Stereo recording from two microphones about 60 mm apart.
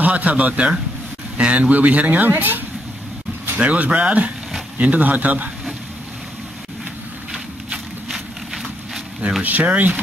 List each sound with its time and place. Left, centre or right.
0.0 s speech: right
9.4 s speech: right